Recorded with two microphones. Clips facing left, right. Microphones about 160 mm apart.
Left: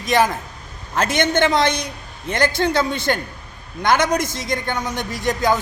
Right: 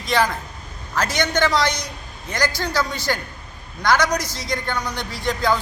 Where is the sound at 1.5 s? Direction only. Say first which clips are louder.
Left 3 dB; 55° left (ahead or behind).